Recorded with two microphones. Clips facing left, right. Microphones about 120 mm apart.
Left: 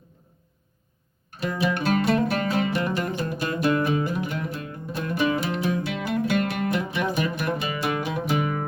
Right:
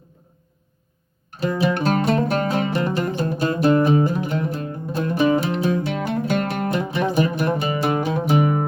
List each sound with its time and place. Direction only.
1.4 s music: 35° right (ahead or behind)